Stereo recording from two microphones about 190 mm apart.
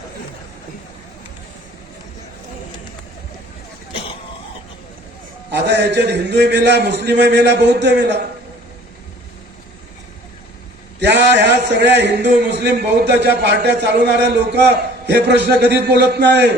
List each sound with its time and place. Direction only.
5.5 s a man's voice: 65° right (ahead or behind)
11.0 s a man's voice: 65° right (ahead or behind)